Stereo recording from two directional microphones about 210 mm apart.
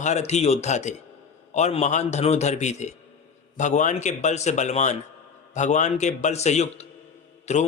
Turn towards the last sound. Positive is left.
turn(degrees=35)  # may be behind; listen again after turning